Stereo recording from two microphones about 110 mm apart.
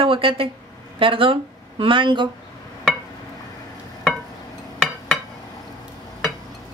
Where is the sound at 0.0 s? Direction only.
55° right (ahead or behind).